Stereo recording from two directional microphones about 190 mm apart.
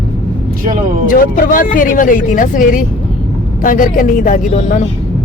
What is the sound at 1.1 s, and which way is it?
Speech, 45° left (ahead or behind).